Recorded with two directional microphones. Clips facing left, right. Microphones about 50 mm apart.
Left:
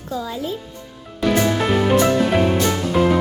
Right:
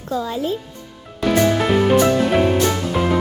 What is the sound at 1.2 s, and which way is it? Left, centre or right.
Music, centre.